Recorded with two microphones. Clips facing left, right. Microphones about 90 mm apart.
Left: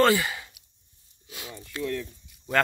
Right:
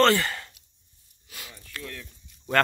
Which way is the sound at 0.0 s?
15° left (ahead or behind).